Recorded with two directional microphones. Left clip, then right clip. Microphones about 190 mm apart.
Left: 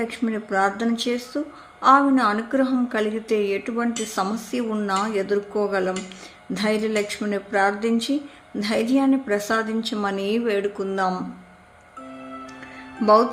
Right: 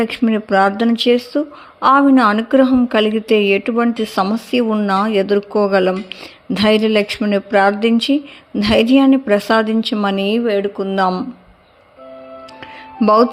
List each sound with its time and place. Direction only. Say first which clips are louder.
0.0 s a woman's voice: right 9 dB; 40° right (ahead or behind)
13.0 s a woman's voice: right 4 dB; 35° right (ahead or behind)